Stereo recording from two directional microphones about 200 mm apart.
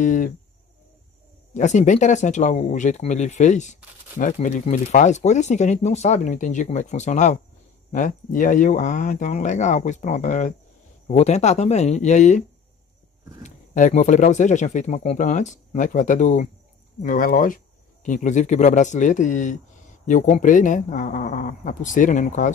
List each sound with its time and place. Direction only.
0.0 s speech: 40° left (ahead or behind)
1.5 s speech: 35° left (ahead or behind)